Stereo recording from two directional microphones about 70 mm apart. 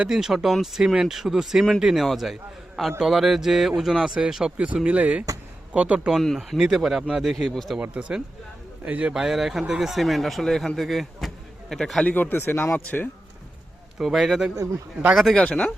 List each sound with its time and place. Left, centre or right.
0.0 s speech: centre
6.1 s speech: centre
6.6 s speech: centre
7.8 s speech: centre
9.1 s a man's voice: centre
12.0 s speech: left
14.0 s speech: centre
15.4 s a man's voice: centre